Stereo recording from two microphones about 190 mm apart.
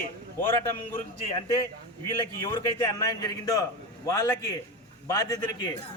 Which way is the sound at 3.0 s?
20° left (ahead or behind).